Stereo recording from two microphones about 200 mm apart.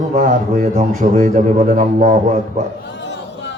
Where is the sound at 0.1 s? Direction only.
40° right (ahead or behind).